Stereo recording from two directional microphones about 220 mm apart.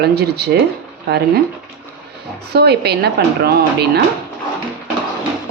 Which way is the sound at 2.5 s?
45° right (ahead or behind).